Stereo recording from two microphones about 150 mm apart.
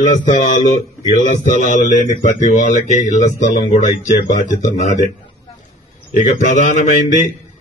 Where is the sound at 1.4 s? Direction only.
55° left (ahead or behind).